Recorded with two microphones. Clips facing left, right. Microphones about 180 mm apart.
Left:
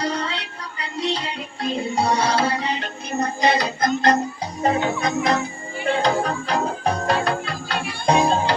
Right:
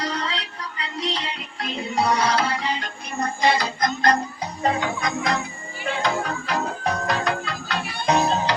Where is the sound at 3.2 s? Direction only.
20° left (ahead or behind).